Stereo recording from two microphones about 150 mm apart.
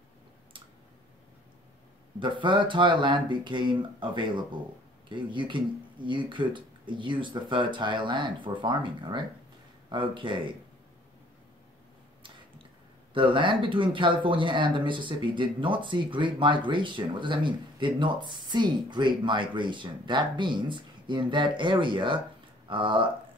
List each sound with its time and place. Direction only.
2.1 s speech: 35° right (ahead or behind)
13.1 s speech: 35° right (ahead or behind)